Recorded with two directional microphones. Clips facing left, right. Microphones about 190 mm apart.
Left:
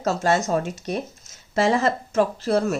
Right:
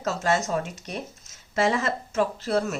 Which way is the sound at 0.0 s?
35° left (ahead or behind).